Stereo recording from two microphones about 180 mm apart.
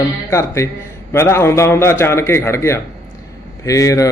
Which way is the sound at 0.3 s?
15° left (ahead or behind).